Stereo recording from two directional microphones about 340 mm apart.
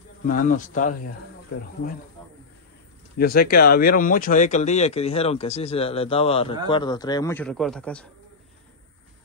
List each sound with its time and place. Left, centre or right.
0.2 s speech: left
3.2 s a man's voice: left; by 8.1 s centre